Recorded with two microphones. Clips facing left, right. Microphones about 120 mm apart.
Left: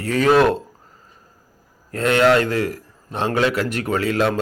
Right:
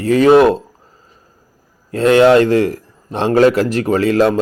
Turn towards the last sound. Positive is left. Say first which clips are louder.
# right 7 dB
turn(degrees=-40)  # may be behind; listen again after turning